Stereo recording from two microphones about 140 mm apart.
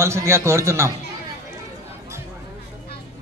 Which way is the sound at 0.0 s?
20° right (ahead or behind).